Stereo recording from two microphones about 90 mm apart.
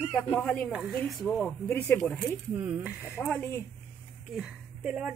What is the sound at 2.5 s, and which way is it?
Speech, 20° right (ahead or behind).